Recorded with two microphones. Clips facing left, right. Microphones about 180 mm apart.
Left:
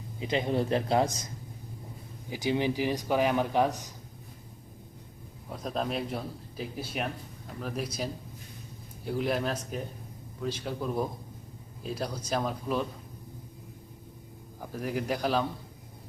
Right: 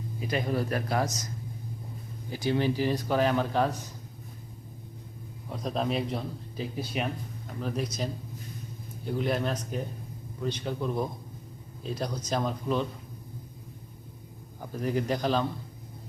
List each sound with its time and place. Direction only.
0.2 s a man's voice: 25° left (ahead or behind)
2.3 s speech: 15° left (ahead or behind)
5.5 s a man's voice: centre (ahead or behind)
9.0 s a man's voice: centre (ahead or behind)
14.6 s speech: 5° left (ahead or behind)